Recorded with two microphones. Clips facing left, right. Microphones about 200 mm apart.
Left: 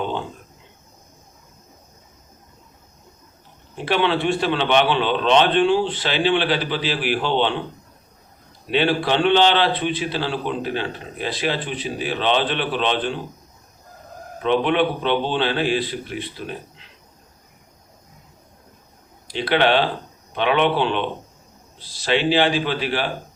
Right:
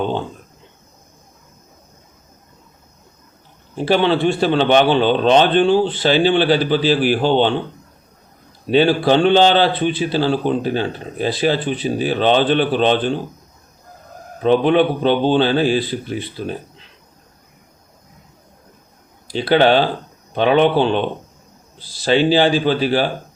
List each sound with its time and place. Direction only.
3.8 s a man's voice: 35° right (ahead or behind)
8.7 s a man's voice: 40° right (ahead or behind)
14.4 s a man's voice: 35° right (ahead or behind)
19.3 s a man's voice: 40° right (ahead or behind)